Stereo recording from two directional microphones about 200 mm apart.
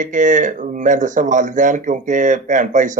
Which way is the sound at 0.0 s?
40° right (ahead or behind).